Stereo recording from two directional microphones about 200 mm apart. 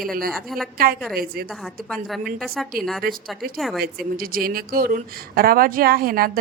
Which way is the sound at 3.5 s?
Centre (ahead or behind).